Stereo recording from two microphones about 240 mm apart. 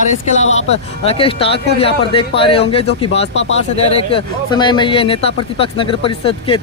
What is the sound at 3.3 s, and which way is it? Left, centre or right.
Speech, left.